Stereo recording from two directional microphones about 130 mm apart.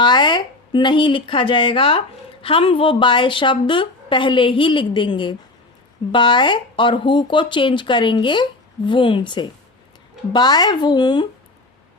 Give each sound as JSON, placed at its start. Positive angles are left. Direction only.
{"t": 0.0, "sound": "a woman's voice", "side_deg": 35}